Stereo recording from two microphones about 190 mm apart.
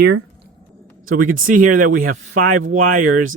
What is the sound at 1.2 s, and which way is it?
Speech, 45° right (ahead or behind).